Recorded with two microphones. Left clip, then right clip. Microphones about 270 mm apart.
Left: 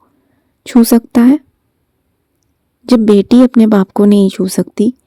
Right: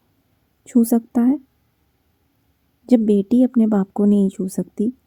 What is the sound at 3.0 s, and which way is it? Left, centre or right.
Speech, left.